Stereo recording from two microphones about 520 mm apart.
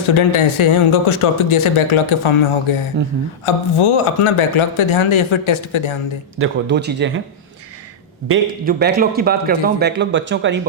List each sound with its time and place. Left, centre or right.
0.0 s speech: left
6.4 s speech: centre
8.3 s speech: centre